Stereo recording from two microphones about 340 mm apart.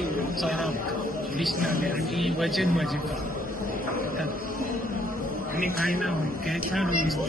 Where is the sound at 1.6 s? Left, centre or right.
Right.